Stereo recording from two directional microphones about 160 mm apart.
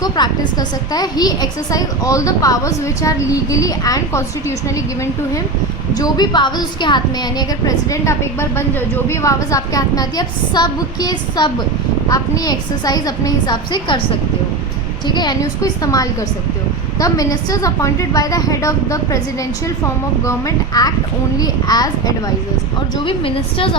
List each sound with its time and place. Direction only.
0.2 s a child's voice: 25° left (ahead or behind)
5.9 s a child's voice: 25° left (ahead or behind)
15.0 s a child's voice: 25° left (ahead or behind)
20.7 s a child's voice: 25° left (ahead or behind)
23.0 s a woman's voice: 35° left (ahead or behind)